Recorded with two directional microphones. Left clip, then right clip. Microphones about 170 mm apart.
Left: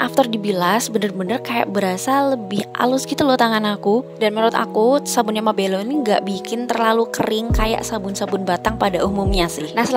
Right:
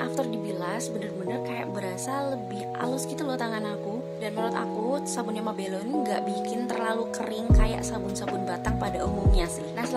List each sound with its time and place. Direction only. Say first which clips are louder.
0.0 s speech: left 12 dB; 50° left (ahead or behind)